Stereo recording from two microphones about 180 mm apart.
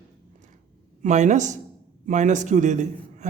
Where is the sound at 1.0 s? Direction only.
40° right (ahead or behind).